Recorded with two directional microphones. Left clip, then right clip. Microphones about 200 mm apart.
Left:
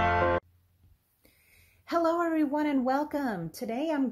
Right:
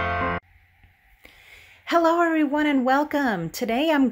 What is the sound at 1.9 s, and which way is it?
Speech, 20° right (ahead or behind).